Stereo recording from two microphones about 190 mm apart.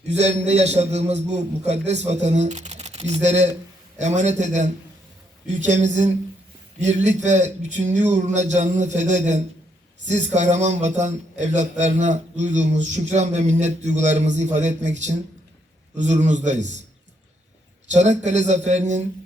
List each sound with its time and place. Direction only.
0.1 s a man's voice: 35° right (ahead or behind)
17.9 s a man's voice: 40° right (ahead or behind)